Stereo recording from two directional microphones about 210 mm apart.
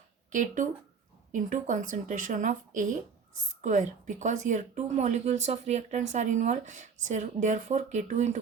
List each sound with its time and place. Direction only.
0.3 s speech: 35° right (ahead or behind)